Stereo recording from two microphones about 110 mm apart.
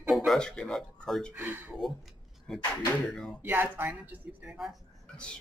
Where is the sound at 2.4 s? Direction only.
10° left (ahead or behind).